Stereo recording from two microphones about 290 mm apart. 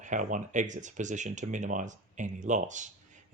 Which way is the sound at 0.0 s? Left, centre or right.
Right.